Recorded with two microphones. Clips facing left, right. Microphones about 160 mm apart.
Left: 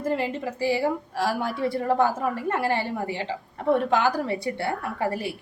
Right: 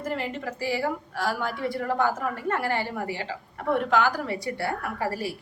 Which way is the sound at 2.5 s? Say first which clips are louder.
Even; 25° left (ahead or behind).